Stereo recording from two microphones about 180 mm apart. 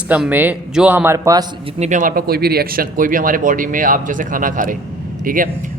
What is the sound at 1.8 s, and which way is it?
Speech, 45° right (ahead or behind).